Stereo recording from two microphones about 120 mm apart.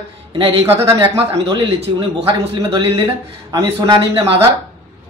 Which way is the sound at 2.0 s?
45° right (ahead or behind).